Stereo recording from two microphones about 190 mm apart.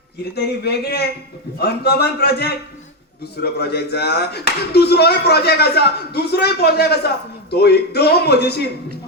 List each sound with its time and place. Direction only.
0.3 s speech: 60° left (ahead or behind)